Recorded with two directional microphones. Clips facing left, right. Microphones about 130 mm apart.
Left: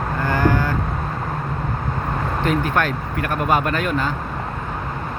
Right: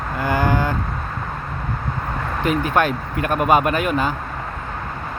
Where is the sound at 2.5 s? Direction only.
15° right (ahead or behind).